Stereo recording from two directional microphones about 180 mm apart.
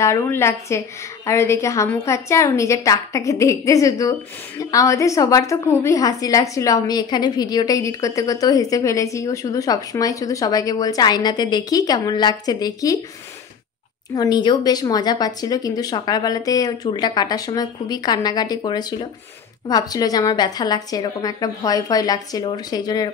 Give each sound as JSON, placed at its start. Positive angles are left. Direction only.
{"t": 0.0, "sound": "a woman's voice", "side_deg": 15}
{"t": 14.1, "sound": "a woman's voice", "side_deg": 20}